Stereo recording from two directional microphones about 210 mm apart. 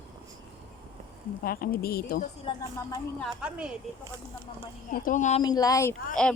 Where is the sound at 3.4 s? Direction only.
5° right (ahead or behind).